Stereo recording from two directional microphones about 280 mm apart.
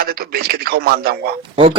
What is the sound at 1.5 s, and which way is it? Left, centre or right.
Speech, centre.